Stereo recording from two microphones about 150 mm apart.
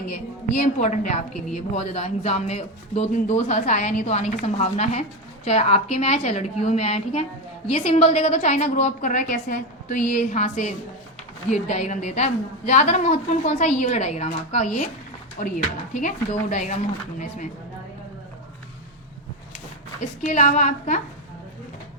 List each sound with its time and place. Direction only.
0.1 s a man's voice: 50° left (ahead or behind)
20.0 s a man's voice: 45° left (ahead or behind)